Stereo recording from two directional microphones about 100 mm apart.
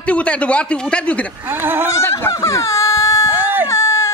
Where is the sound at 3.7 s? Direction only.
30° left (ahead or behind).